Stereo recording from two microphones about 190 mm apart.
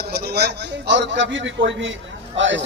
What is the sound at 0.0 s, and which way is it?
A man's voice, 55° right (ahead or behind).